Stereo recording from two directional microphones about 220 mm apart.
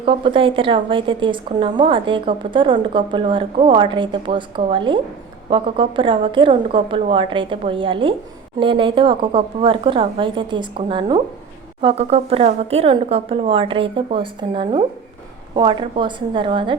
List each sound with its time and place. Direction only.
0.0 s a woman's voice: 25° right (ahead or behind)